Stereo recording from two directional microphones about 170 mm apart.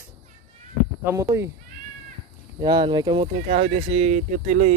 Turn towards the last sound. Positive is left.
turn(degrees=-45)  # may be behind; listen again after turning